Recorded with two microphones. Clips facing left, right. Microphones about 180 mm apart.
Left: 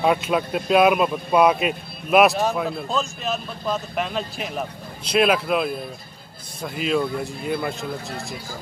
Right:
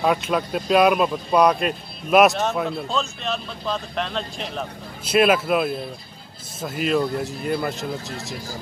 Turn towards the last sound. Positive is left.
turn(degrees=0)  # may be behind; listen again after turning